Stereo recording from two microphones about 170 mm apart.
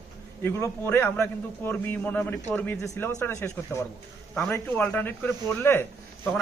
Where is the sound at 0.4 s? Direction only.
15° left (ahead or behind).